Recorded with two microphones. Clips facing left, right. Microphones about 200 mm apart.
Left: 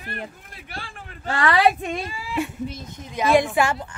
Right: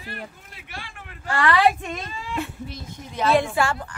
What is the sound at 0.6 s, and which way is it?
Speech, 35° left (ahead or behind).